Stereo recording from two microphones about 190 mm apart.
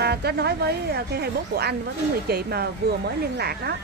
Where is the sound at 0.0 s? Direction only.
60° right (ahead or behind).